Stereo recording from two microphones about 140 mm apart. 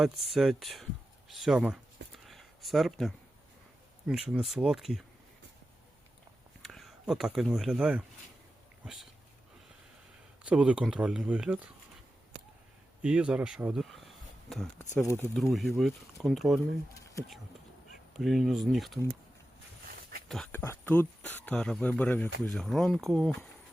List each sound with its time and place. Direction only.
0.0 s speech: centre (ahead or behind)
1.3 s a sound: centre (ahead or behind)
4.0 s speech: 5° right (ahead or behind)
6.6 s speech: centre (ahead or behind)
10.4 s speech: 10° right (ahead or behind)
13.0 s speech: 5° right (ahead or behind)
15.1 s speech: 15° left (ahead or behind)
15.5 s speech: centre (ahead or behind)
18.2 s speech: centre (ahead or behind)
19.9 s a sound: 90° right
20.2 s a sound: 5° left (ahead or behind)
20.5 s speech: 15° left (ahead or behind)